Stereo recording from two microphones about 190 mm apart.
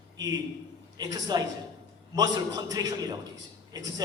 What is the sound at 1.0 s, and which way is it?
A man's voice, 20° right (ahead or behind).